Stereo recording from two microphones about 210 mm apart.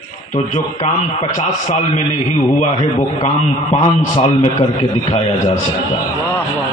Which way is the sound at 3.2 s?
35° left (ahead or behind).